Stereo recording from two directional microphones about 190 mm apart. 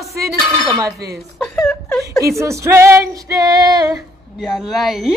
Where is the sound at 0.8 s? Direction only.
20° right (ahead or behind).